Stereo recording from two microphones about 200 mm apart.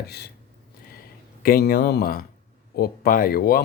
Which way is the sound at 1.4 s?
50° left (ahead or behind).